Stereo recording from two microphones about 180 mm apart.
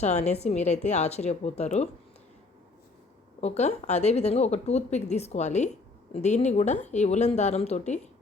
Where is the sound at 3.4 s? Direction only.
35° left (ahead or behind).